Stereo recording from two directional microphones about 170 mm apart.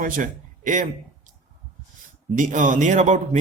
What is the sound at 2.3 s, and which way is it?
Speech, 50° right (ahead or behind).